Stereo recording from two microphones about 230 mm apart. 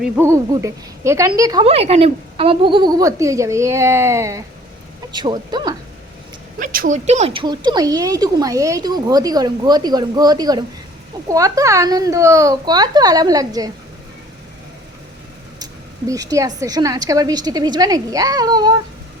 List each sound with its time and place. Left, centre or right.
0.0 s a woman's voice: centre
6.6 s a woman's voice: right; by 13.7 s centre
15.5 s a sound: centre
16.6 s a woman's voice: centre